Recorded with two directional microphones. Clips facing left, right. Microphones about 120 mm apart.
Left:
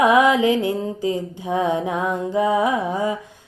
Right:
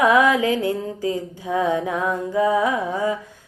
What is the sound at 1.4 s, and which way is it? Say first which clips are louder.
Mantra: even; 20° left (ahead or behind).